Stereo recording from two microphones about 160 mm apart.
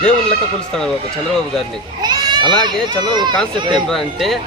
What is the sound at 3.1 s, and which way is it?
Speech, 25° right (ahead or behind).